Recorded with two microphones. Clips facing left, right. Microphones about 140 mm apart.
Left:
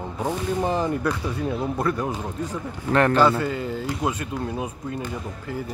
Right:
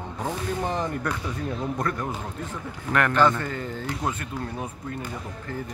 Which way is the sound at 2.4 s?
30° left (ahead or behind).